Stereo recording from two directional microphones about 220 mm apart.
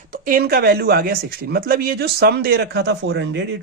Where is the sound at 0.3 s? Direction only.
40° right (ahead or behind).